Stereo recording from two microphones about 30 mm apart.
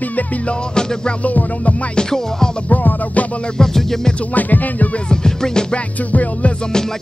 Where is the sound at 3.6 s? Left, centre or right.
Centre.